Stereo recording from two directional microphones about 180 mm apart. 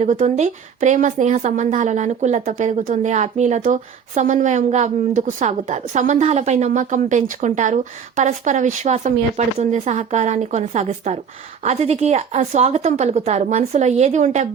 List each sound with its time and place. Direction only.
0.0 s speech: 40° right (ahead or behind)